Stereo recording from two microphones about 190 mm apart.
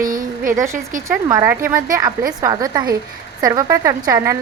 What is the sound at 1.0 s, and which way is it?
A woman's voice, 15° right (ahead or behind).